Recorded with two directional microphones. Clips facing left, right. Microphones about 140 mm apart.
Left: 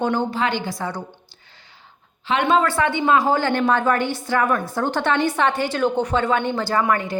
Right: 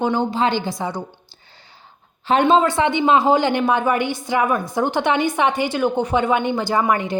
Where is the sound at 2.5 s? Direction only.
25° right (ahead or behind).